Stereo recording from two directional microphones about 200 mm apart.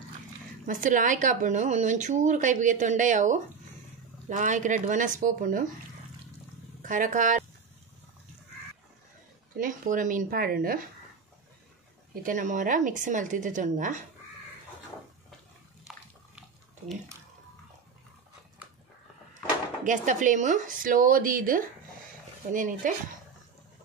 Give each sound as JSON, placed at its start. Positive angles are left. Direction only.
{"t": 0.7, "sound": "speech", "side_deg": -40}
{"t": 6.8, "sound": "speech", "side_deg": -40}
{"t": 9.6, "sound": "speech", "side_deg": -40}
{"t": 12.2, "sound": "speech", "side_deg": -40}
{"t": 19.8, "sound": "speech", "side_deg": -40}